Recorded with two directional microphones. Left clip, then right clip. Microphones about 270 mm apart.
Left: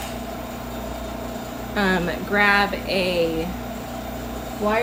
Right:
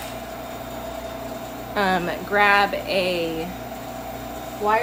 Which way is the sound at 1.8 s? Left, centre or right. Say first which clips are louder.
Right 1 dB; centre.